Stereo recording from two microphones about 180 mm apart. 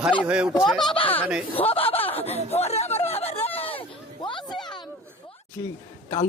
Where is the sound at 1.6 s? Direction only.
30° left (ahead or behind).